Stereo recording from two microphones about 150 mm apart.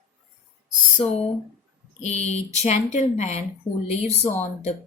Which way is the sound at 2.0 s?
50° left (ahead or behind).